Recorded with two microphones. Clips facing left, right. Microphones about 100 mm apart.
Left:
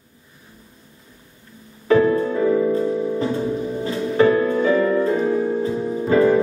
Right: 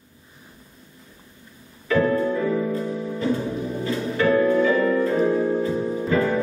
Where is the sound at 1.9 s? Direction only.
25° left (ahead or behind).